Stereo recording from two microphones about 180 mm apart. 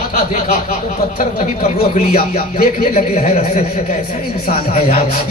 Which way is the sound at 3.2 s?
40° left (ahead or behind).